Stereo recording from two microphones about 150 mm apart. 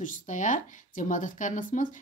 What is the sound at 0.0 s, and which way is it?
A woman's voice, 60° left (ahead or behind).